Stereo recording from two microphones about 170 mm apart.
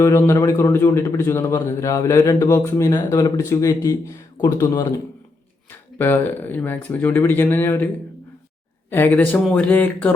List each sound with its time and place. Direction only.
0.0 s a man's voice: 15° left (ahead or behind)
6.0 s a man's voice: 10° left (ahead or behind)
8.9 s a man's voice: 10° left (ahead or behind)